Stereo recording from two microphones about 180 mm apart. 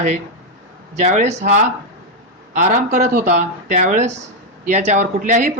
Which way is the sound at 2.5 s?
45° right (ahead or behind).